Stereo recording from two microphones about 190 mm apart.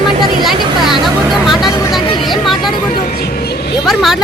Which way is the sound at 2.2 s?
Centre (ahead or behind).